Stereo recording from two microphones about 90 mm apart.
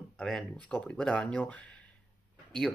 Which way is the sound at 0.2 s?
5° left (ahead or behind).